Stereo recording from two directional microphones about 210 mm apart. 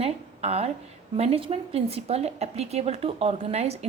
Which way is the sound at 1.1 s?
30° right (ahead or behind).